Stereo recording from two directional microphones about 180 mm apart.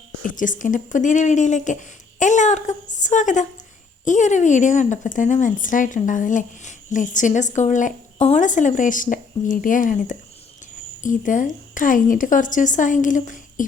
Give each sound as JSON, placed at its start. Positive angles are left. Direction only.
{"t": 0.2, "sound": "speech", "side_deg": 45}